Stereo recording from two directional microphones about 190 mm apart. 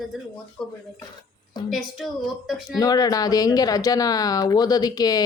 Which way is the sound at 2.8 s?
20° left (ahead or behind).